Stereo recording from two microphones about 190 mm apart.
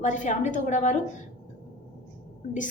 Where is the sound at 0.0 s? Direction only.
40° left (ahead or behind).